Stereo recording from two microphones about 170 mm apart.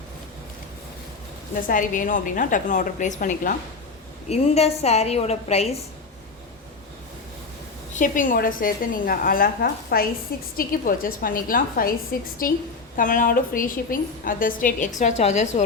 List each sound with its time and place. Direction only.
1.6 s a woman's voice: 50° left (ahead or behind)
4.3 s a woman's voice: 35° left (ahead or behind)
7.9 s a woman's voice: 50° left (ahead or behind)